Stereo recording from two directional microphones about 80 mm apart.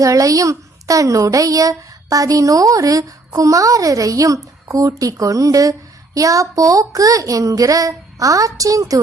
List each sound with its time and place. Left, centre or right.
0.0 s a child's voice: right